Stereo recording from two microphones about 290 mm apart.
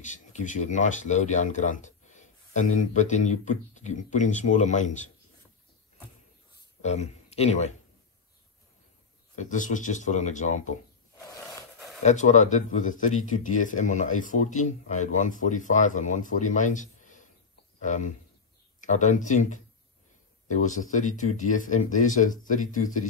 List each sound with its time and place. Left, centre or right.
0.0 s speech: left
6.8 s speech: left
9.4 s speech: left
12.0 s speech: left
20.6 s speech: left